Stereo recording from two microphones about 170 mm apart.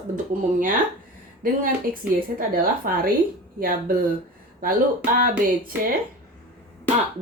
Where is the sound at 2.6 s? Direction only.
55° right (ahead or behind).